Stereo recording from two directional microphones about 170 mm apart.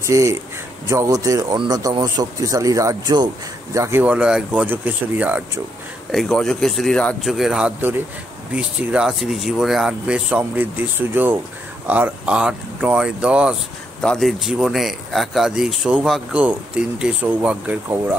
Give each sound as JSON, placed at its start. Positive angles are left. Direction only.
{"t": 0.0, "sound": "speech", "side_deg": -15}
{"t": 6.1, "sound": "speech", "side_deg": 5}